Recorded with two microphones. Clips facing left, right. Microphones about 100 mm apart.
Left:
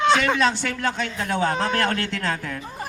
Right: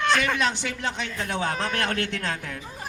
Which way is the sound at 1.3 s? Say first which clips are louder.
Left 5 dB; 35° left (ahead or behind).